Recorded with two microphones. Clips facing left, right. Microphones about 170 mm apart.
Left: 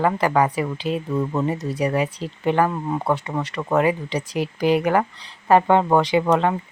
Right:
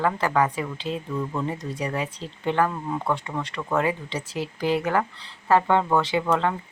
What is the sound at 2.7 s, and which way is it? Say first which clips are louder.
Speech: left 4 dB; 25° left (ahead or behind).